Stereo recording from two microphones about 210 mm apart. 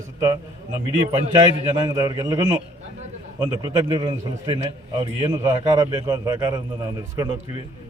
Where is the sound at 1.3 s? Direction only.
20° right (ahead or behind).